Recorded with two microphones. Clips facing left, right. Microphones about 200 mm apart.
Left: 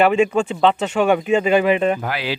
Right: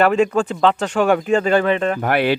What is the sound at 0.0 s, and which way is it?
Speech, 10° left (ahead or behind).